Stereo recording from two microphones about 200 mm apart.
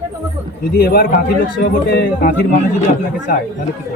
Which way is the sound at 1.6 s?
50° left (ahead or behind).